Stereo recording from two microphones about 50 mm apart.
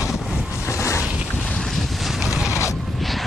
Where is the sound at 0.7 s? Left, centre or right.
Left.